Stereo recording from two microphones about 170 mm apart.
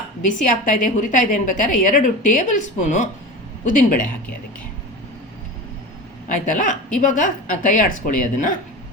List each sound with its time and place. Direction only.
0.4 s a woman's voice: 50° left (ahead or behind)
6.2 s a woman's voice: 50° left (ahead or behind)